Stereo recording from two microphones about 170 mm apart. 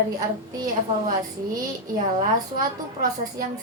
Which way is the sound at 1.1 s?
20° right (ahead or behind).